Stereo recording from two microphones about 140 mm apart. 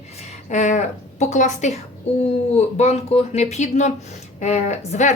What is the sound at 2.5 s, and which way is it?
A woman's voice, 50° left (ahead or behind).